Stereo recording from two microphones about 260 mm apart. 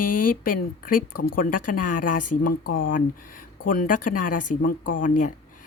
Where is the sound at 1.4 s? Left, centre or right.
Left.